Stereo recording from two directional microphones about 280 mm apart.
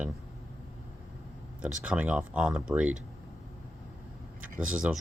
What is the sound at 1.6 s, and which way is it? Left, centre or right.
Speech, centre.